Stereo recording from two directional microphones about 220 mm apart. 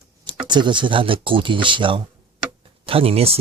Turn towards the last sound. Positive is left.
turn(degrees=-25)  # may be behind; listen again after turning